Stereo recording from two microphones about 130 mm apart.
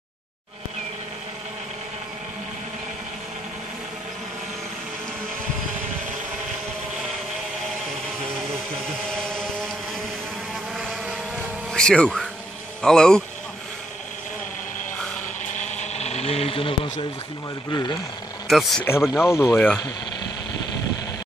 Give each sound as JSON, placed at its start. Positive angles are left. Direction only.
{"t": 10.8, "sound": "vehicle", "side_deg": -5}
{"t": 11.7, "sound": "insect", "side_deg": 5}
{"t": 12.8, "sound": "speech", "side_deg": 5}
{"t": 15.5, "sound": "a sound", "side_deg": 65}
{"t": 17.6, "sound": "speech", "side_deg": 30}
{"t": 18.5, "sound": "speech", "side_deg": 0}
{"t": 19.3, "sound": "speech", "side_deg": 20}